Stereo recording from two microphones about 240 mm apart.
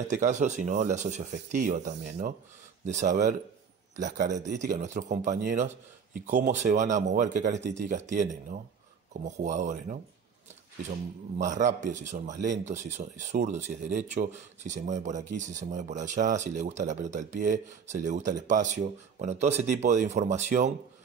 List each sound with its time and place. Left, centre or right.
0.1 s speech: right
11.3 s speech: right